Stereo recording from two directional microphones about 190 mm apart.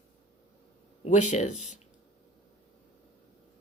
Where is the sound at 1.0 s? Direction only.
40° left (ahead or behind).